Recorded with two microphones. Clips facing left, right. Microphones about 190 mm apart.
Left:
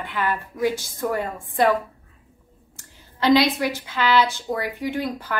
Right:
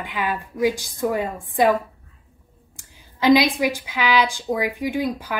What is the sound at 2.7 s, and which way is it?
A woman's voice, 10° right (ahead or behind).